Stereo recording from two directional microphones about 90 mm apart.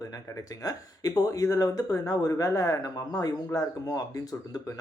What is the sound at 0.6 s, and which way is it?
Speech, 40° left (ahead or behind).